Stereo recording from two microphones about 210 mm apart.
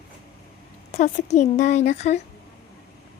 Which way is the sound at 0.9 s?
35° left (ahead or behind).